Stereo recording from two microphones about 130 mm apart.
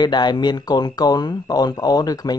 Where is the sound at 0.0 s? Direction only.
35° left (ahead or behind).